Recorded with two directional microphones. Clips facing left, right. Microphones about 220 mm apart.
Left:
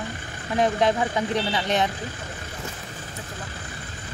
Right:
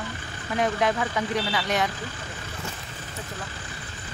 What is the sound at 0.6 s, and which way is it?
Speech, 30° left (ahead or behind).